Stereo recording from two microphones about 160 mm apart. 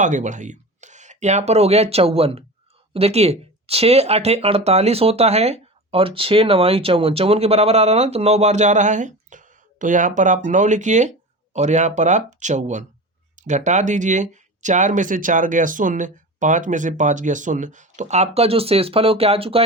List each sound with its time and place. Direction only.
0.0 s speech: 50° right (ahead or behind)